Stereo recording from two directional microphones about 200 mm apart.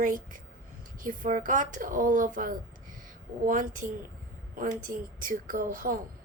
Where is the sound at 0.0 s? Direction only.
40° right (ahead or behind).